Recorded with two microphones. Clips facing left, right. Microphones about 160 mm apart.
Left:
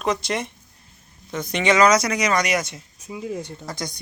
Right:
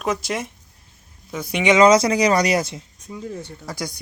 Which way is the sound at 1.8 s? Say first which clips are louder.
Right 6 dB; 25° right (ahead or behind).